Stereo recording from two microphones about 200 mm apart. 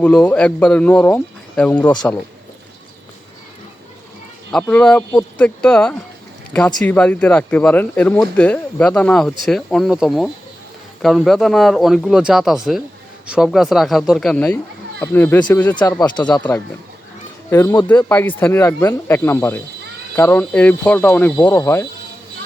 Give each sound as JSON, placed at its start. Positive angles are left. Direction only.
{"t": 0.0, "sound": "speech", "side_deg": 5}
{"t": 4.5, "sound": "speech", "side_deg": 5}
{"t": 16.4, "sound": "speech", "side_deg": 10}